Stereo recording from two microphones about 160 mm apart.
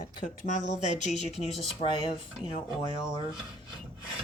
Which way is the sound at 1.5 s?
Centre (ahead or behind).